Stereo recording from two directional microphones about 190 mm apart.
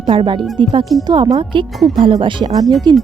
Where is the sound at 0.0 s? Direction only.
25° right (ahead or behind).